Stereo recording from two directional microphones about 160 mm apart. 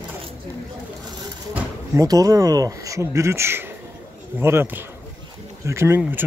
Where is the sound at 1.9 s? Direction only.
20° right (ahead or behind).